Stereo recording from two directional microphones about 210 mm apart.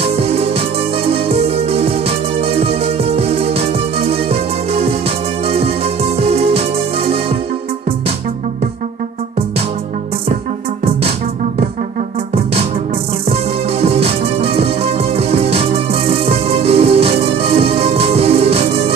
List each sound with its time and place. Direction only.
0.0 s music: 30° right (ahead or behind)
6.1 s music: 30° right (ahead or behind)
13.3 s music: 30° right (ahead or behind)